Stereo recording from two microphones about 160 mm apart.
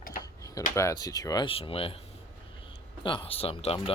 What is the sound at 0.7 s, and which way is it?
Speech, 20° left (ahead or behind).